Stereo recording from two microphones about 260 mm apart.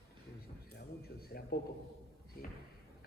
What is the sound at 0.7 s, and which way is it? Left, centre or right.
Speech, left.